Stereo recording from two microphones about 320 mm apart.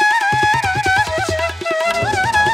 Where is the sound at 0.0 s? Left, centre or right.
Centre.